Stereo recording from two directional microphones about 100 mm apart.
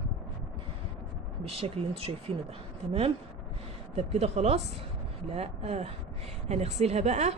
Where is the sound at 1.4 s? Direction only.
85° right.